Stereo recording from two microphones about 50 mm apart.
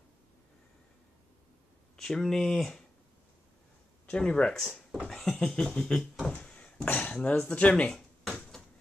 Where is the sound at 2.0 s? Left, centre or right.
Centre.